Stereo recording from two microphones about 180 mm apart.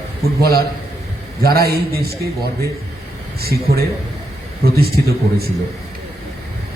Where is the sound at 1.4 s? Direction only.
60° right (ahead or behind).